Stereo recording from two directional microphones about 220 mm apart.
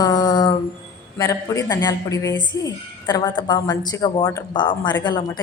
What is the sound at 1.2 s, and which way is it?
A woman's voice, 15° left (ahead or behind).